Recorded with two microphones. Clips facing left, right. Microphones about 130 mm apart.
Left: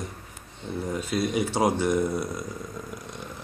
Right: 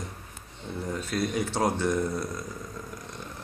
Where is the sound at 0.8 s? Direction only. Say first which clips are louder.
Left 2 dB; 10° left (ahead or behind).